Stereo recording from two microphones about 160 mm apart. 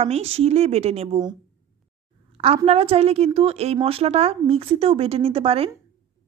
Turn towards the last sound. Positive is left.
turn(degrees=-35)  # may be behind; listen again after turning